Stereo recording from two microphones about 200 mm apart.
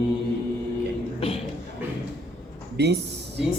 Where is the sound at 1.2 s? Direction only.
30° left (ahead or behind).